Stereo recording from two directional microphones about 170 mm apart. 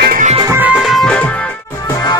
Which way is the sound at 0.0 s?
55° right (ahead or behind).